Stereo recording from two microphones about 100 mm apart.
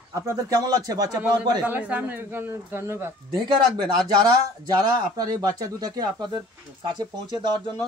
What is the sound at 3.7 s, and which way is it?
Speech, 45° right (ahead or behind).